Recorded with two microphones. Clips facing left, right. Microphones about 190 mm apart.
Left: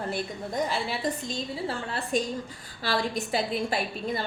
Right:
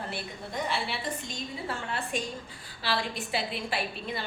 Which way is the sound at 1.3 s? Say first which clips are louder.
Left 4 dB; 35° left (ahead or behind).